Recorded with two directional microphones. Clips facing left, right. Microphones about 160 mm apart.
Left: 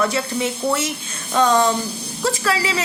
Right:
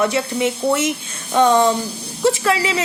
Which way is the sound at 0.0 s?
20° right (ahead or behind).